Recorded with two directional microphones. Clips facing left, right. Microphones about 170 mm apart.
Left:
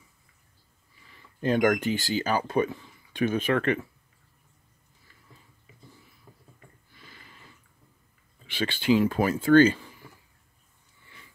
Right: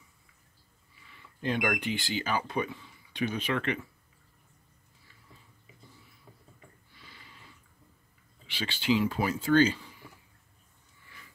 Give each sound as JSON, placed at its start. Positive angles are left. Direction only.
{"t": 1.4, "sound": "speech", "side_deg": 45}
{"t": 7.0, "sound": "a sound", "side_deg": 50}
{"t": 8.5, "sound": "speech", "side_deg": 50}